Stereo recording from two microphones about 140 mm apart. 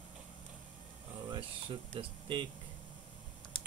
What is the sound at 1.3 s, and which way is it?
Speech, 35° right (ahead or behind).